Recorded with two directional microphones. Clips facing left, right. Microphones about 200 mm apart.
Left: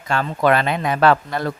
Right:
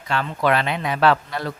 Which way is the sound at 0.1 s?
45° left (ahead or behind).